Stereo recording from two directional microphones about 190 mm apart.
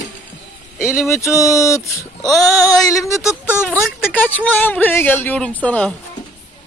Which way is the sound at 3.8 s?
5° left (ahead or behind).